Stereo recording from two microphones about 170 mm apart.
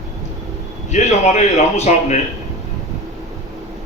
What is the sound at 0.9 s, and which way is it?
A man's voice, 40° left (ahead or behind).